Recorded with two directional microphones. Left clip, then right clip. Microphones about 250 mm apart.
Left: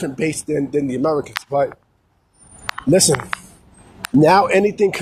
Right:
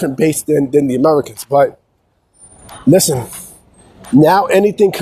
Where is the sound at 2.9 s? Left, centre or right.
Right.